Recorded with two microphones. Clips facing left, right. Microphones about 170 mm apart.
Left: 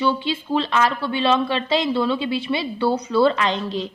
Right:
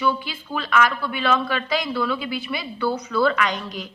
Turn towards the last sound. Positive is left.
turn(degrees=30)  # may be behind; listen again after turning